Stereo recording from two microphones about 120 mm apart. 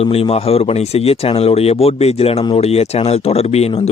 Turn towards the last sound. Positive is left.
turn(degrees=55)  # may be behind; listen again after turning